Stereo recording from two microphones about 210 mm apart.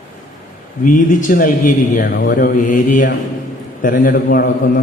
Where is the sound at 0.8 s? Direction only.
40° left (ahead or behind).